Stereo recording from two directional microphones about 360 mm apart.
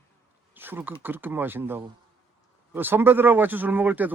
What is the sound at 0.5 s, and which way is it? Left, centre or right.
A man's voice, centre.